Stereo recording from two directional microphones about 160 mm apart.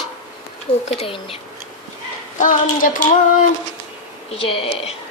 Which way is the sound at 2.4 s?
55° left (ahead or behind).